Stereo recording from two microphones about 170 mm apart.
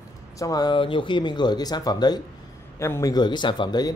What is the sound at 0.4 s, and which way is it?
A man's voice, 20° left (ahead or behind).